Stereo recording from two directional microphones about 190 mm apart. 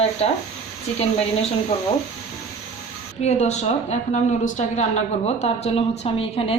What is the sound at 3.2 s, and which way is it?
A woman's voice, 35° left (ahead or behind).